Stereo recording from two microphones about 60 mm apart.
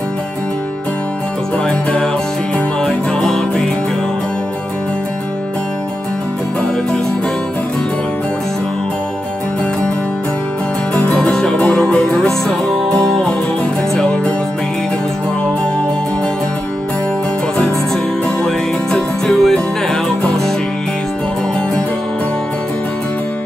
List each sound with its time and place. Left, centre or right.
1.7 s music: centre
11.0 s music: centre
18.4 s music: centre